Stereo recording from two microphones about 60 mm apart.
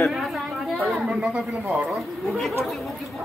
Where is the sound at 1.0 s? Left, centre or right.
Centre.